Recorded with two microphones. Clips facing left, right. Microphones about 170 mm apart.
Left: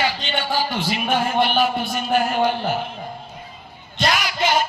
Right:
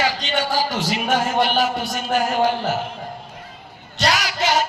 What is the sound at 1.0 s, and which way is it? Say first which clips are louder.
Speech: even; 45° right (ahead or behind).